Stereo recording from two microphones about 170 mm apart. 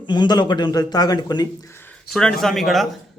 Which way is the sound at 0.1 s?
25° left (ahead or behind).